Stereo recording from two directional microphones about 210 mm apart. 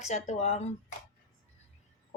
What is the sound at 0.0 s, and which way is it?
Speech, 35° left (ahead or behind).